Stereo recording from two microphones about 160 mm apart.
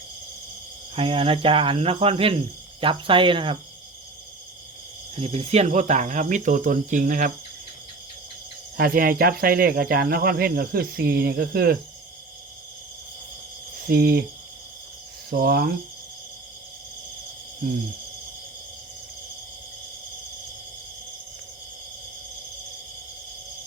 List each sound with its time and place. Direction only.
0.9 s cricket: 35° right (ahead or behind)
5.1 s speech: 40° right (ahead or behind); by 7.3 s 60° right (ahead or behind)
8.8 s speech: 65° right (ahead or behind)
13.8 s speech: 75° right (ahead or behind)
15.3 s speech: 70° right (ahead or behind)